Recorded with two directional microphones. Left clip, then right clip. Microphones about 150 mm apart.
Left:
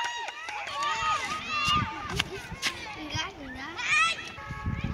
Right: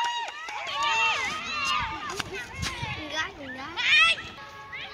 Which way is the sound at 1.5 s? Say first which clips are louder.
Left 2 dB; 70° left (ahead or behind).